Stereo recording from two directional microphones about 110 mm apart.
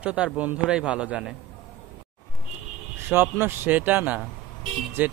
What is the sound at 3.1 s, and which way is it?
A man's voice, 20° right (ahead or behind).